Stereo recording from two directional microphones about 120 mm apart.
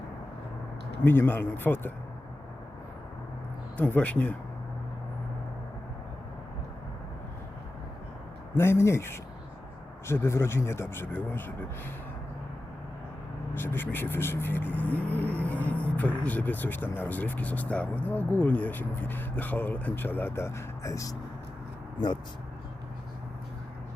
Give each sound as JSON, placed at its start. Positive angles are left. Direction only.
{"t": 1.0, "sound": "speech", "side_deg": 20}
{"t": 3.8, "sound": "speech", "side_deg": 10}
{"t": 8.5, "sound": "speech", "side_deg": 20}
{"t": 13.5, "sound": "speech", "side_deg": 15}